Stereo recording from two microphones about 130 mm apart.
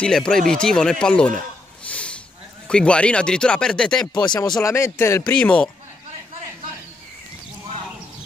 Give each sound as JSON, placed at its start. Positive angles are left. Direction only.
{"t": 0.0, "sound": "speech", "side_deg": 5}
{"t": 1.9, "sound": "a sound", "side_deg": 10}
{"t": 2.7, "sound": "speech", "side_deg": 10}
{"t": 4.1, "sound": "speech", "side_deg": 35}
{"t": 4.6, "sound": "speech", "side_deg": 20}
{"t": 5.3, "sound": "speech", "side_deg": 10}